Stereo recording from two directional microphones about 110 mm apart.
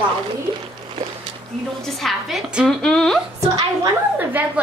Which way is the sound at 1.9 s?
Centre (ahead or behind).